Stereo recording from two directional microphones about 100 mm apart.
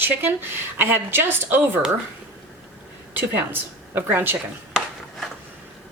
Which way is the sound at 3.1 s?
20° right (ahead or behind).